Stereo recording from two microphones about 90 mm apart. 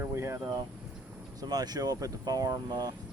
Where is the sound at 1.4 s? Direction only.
45° right (ahead or behind).